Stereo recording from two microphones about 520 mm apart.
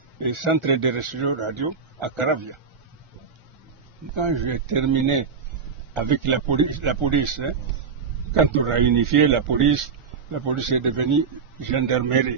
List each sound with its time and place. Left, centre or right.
0.2 s speech: right
4.1 s a man's voice: right